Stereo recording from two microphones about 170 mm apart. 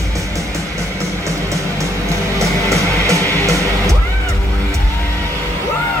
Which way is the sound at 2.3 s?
20° right (ahead or behind).